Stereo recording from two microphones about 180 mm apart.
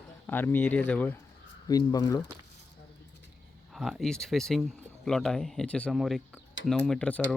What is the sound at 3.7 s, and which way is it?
Speech, centre (ahead or behind).